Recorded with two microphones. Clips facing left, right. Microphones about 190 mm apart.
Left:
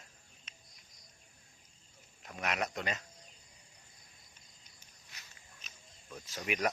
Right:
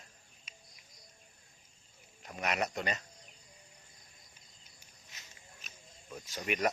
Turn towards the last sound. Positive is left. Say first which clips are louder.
# right 2 dB
turn(degrees=0)  # may be behind; listen again after turning